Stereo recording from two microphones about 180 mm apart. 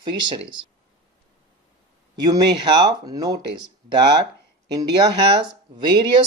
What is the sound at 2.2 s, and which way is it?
Speech, 20° right (ahead or behind).